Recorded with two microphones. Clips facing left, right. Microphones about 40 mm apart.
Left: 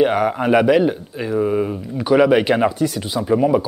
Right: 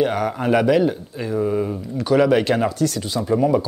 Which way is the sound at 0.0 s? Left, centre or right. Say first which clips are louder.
Left 4 dB; centre.